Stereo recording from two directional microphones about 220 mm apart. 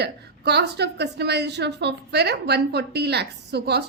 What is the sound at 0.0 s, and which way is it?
A woman's voice, 50° right (ahead or behind).